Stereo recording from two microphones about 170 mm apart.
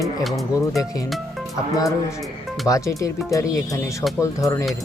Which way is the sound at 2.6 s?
20° left (ahead or behind).